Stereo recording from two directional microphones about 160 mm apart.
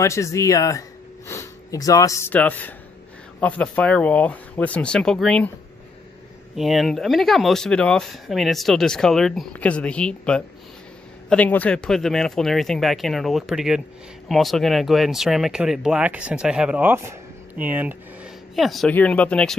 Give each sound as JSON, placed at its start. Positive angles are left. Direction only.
{"t": 0.0, "sound": "speech", "side_deg": 20}
{"t": 6.5, "sound": "speech", "side_deg": 0}
{"t": 18.5, "sound": "speech", "side_deg": 0}